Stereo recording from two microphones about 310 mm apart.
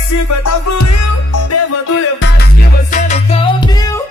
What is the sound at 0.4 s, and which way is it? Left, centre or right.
Music, left.